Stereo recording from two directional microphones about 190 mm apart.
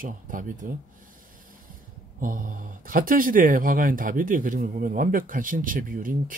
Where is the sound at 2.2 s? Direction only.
45° right (ahead or behind).